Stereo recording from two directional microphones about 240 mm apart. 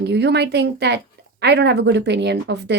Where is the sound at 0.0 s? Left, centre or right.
Right.